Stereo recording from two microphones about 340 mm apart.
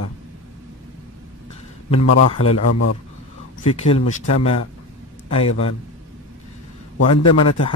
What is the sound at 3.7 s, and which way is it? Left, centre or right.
Speech, centre.